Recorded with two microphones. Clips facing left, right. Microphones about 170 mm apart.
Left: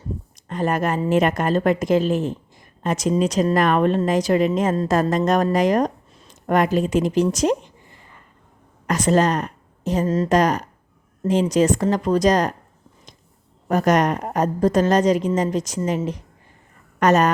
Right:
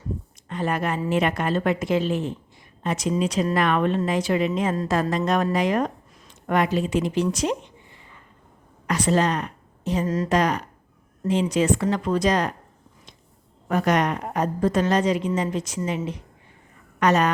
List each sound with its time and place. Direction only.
0.4 s speech: 45° left (ahead or behind)
8.9 s a woman's voice: 45° left (ahead or behind)
13.7 s a woman's voice: 40° left (ahead or behind)
17.0 s speech: 45° left (ahead or behind)